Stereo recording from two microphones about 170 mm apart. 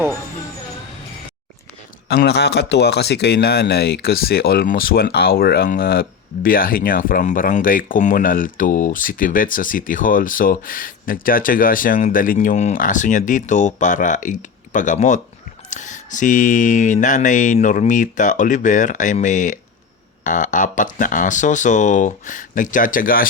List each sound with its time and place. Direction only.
2.0 s speech: 75° left (ahead or behind); by 23.3 s 55° left (ahead or behind)